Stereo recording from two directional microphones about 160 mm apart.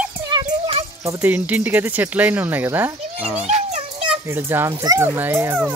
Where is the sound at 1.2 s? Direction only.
10° right (ahead or behind).